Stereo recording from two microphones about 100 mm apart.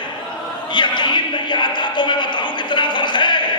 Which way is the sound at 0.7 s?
50° left (ahead or behind).